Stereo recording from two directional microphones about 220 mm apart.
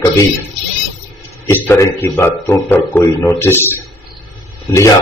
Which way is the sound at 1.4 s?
10° left (ahead or behind).